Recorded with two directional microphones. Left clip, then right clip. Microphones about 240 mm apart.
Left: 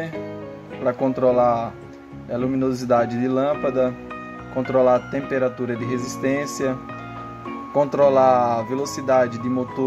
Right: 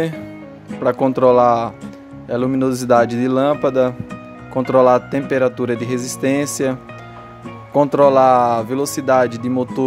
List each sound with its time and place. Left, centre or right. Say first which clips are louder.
0.8 s speech: right 6 dB; right